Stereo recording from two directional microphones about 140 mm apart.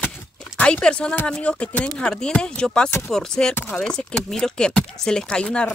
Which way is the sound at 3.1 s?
5° left (ahead or behind).